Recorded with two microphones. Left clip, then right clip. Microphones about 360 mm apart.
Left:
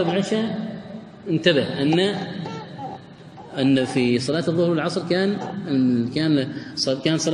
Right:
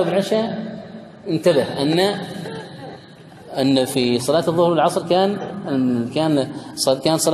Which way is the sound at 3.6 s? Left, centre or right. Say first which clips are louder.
Right 2 dB; centre.